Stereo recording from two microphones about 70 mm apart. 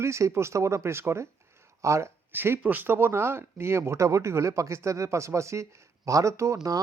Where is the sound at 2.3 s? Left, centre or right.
Right.